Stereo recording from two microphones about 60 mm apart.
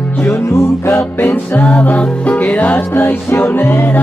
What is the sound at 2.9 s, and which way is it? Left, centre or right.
Music, left.